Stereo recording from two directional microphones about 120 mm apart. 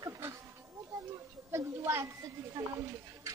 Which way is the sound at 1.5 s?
25° right (ahead or behind).